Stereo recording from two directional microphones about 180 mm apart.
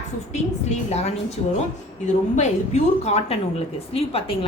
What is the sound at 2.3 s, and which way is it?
A woman's voice, 40° left (ahead or behind).